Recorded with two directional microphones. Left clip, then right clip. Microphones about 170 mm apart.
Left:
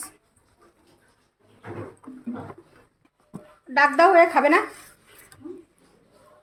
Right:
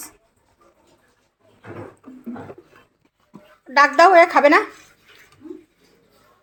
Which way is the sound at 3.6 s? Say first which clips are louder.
Right 4 dB; 40° right (ahead or behind).